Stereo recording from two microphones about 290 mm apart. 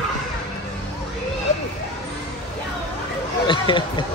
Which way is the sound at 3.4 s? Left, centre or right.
Centre.